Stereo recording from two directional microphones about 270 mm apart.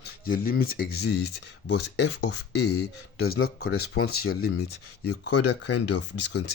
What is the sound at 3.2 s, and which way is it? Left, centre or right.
Speech, left.